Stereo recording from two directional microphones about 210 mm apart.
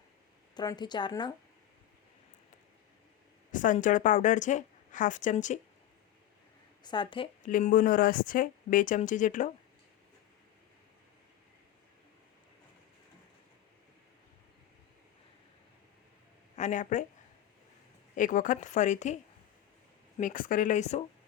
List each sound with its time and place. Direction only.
0.5 s speech: 20° left (ahead or behind)
3.5 s a woman's voice: 40° left (ahead or behind)
6.8 s speech: 20° left (ahead or behind)
7.4 s a woman's voice: 40° left (ahead or behind)
16.6 s a woman's voice: 35° left (ahead or behind)
18.2 s a woman's voice: 40° left (ahead or behind)
20.1 s a woman's voice: 40° left (ahead or behind)